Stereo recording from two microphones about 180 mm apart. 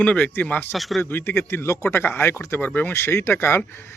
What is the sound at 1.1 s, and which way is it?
A man's voice, 10° left (ahead or behind).